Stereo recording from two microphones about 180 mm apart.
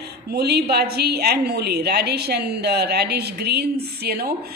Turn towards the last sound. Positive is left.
turn(degrees=-60)  # may be behind; listen again after turning